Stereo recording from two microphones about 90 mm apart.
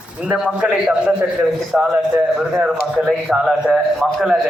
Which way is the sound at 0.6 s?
10° right (ahead or behind).